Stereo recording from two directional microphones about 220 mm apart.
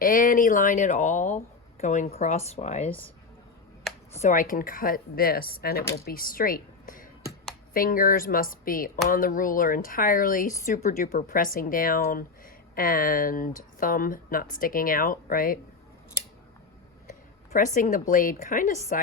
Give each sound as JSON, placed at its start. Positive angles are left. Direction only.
{"t": 0.0, "sound": "speech", "side_deg": 40}
{"t": 4.2, "sound": "a woman's voice", "side_deg": 35}
{"t": 17.1, "sound": "speech", "side_deg": 35}